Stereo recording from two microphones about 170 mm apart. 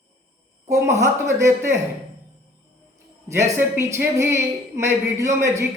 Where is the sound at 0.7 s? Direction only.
15° right (ahead or behind).